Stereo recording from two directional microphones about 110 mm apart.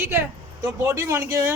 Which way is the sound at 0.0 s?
20° right (ahead or behind).